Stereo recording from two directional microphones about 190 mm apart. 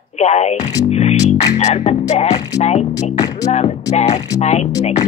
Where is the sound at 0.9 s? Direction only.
35° left (ahead or behind).